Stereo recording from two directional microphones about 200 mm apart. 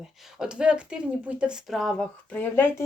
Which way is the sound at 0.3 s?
5° right (ahead or behind).